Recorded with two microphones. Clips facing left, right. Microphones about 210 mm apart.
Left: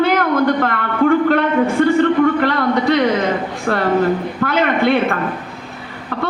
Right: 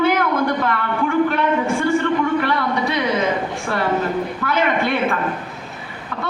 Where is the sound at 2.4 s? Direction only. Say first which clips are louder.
Left 4 dB; 65° left (ahead or behind).